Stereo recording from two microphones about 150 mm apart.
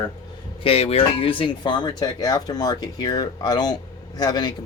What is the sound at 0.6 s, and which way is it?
Speech, 40° left (ahead or behind).